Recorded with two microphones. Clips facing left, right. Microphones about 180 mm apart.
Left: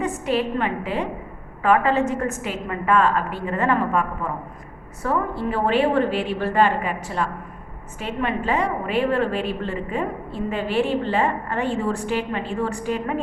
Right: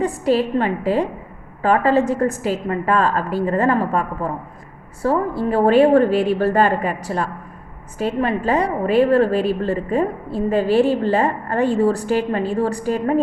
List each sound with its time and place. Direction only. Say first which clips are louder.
0.0 s a woman's voice: right 5 dB; 35° right (ahead or behind)